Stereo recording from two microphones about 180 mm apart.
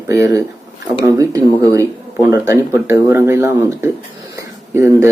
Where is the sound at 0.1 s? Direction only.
15° right (ahead or behind).